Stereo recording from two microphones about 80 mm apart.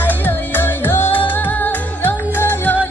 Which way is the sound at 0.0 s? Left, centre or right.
Left.